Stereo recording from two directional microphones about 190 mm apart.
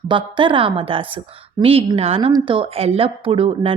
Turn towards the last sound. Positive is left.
turn(degrees=-30)  # may be behind; listen again after turning